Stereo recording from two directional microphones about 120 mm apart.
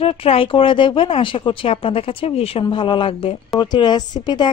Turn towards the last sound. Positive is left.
turn(degrees=40)  # may be behind; listen again after turning